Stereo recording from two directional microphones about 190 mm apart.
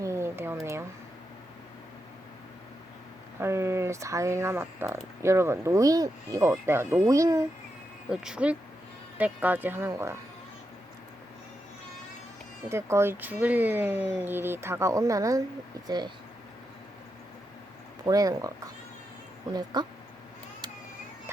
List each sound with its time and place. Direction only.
0.0 s a sound: 15° right (ahead or behind)
3.4 s speech: 15° right (ahead or behind)
8.1 s speech: 5° right (ahead or behind)
12.6 s speech: 15° right (ahead or behind)
18.0 s speech: 20° right (ahead or behind)
19.7 s speech: 20° right (ahead or behind)